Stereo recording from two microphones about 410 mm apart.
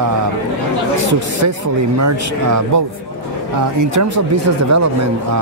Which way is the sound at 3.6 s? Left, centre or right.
Right.